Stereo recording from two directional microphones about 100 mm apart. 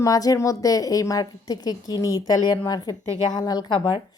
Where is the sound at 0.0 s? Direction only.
35° left (ahead or behind).